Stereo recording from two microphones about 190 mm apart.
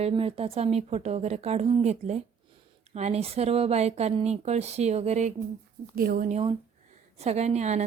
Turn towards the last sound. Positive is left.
turn(degrees=-35)  # may be behind; listen again after turning